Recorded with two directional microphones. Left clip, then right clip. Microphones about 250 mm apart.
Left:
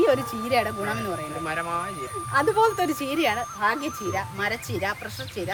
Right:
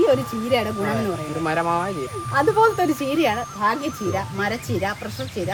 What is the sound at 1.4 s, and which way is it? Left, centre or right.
Speech, centre.